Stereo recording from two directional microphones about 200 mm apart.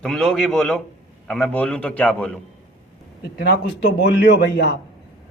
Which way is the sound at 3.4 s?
60° left (ahead or behind).